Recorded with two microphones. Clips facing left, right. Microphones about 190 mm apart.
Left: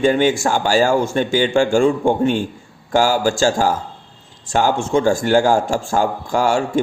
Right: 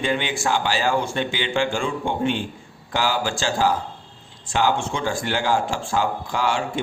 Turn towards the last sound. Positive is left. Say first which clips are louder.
# left 6 dB
turn(degrees=45)  # may be behind; listen again after turning